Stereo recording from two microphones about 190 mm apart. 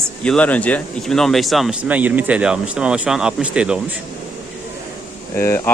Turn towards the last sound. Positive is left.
turn(degrees=15)  # may be behind; listen again after turning